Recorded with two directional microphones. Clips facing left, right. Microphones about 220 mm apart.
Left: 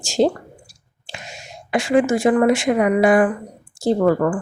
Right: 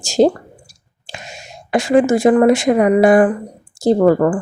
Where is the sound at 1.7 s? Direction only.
40° right (ahead or behind).